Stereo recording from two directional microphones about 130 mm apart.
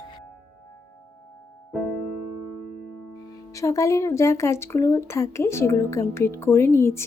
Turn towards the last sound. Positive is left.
turn(degrees=20)  # may be behind; listen again after turning